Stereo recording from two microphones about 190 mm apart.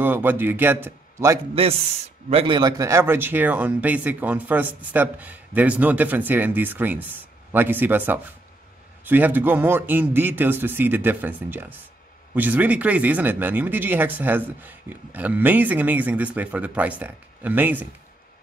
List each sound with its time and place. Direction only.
0.0 s speech: 10° right (ahead or behind)
1.5 s speech: 30° right (ahead or behind); by 17.8 s 10° right (ahead or behind)